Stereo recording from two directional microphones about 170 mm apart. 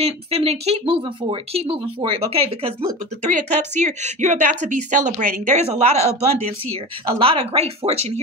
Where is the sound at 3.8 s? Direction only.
45° right (ahead or behind).